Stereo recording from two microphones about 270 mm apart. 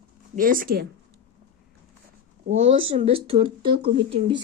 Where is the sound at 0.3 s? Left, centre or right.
Right.